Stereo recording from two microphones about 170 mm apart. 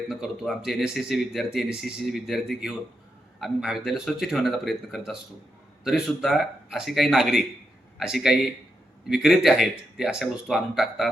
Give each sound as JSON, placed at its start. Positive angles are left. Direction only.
{"t": 0.1, "sound": "speech", "side_deg": 0}